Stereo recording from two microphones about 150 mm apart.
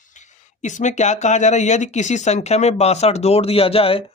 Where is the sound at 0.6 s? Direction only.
55° left (ahead or behind).